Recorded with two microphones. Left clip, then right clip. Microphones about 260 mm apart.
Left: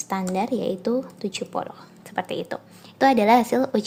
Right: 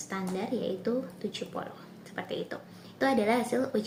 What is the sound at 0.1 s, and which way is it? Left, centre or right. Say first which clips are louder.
Speech: left 9 dB; left.